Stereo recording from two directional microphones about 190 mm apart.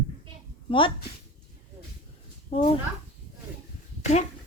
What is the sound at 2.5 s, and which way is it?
Speech, 35° left (ahead or behind).